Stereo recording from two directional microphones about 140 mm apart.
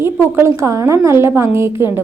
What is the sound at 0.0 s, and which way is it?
A woman's voice, 20° right (ahead or behind).